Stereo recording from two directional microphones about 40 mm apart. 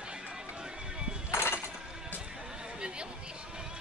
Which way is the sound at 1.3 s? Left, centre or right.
Left.